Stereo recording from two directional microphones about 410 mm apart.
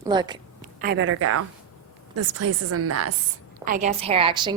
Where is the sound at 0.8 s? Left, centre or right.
Right.